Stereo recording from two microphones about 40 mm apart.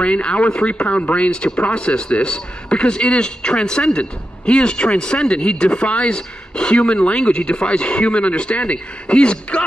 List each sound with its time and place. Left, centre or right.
0.0 s speech: left